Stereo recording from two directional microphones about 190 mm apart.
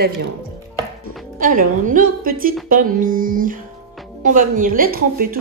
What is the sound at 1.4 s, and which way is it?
Speech, 45° right (ahead or behind).